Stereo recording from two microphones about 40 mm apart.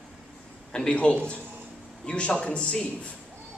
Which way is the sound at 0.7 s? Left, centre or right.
Left.